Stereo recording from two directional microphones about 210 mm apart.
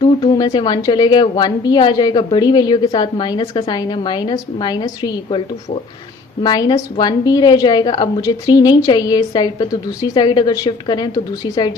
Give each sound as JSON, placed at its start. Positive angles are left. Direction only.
{"t": 0.0, "sound": "a woman's voice", "side_deg": 20}
{"t": 6.4, "sound": "a woman's voice", "side_deg": 20}